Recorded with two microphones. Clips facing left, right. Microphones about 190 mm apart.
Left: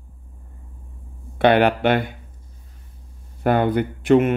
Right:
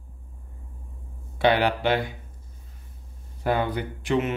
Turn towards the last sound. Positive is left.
turn(degrees=55)  # may be behind; listen again after turning